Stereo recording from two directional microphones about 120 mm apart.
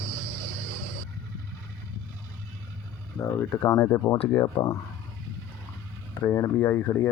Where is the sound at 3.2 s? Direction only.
25° left (ahead or behind).